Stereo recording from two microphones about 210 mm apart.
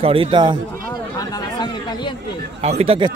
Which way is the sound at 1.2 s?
20° left (ahead or behind).